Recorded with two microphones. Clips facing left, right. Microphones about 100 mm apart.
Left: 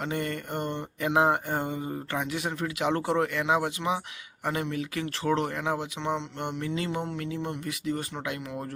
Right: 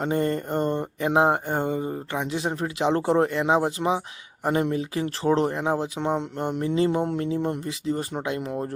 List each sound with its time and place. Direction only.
0.0 s speech: 30° right (ahead or behind)
6.0 s music: 40° right (ahead or behind)
6.6 s speech: 30° right (ahead or behind)
7.6 s speech: 30° right (ahead or behind)